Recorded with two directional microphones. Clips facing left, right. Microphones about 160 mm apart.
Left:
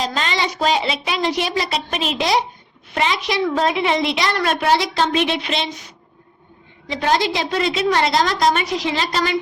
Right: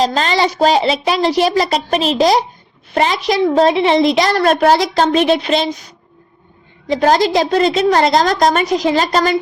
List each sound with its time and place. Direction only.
0.0 s a woman's voice: 35° right (ahead or behind)
6.8 s a woman's voice: 40° right (ahead or behind)